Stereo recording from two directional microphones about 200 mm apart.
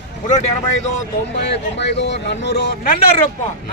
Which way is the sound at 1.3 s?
60° left (ahead or behind).